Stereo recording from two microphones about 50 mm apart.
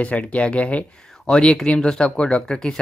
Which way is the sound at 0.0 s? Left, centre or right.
Left.